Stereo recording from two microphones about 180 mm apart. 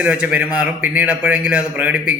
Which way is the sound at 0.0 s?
5° right (ahead or behind).